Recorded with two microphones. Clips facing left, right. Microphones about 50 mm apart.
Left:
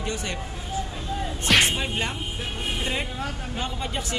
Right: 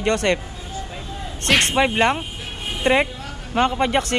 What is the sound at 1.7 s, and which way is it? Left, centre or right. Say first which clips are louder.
Speech: right 10 dB; right.